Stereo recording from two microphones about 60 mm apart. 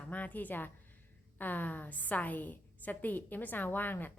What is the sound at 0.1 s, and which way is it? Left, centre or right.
A woman's voice, left.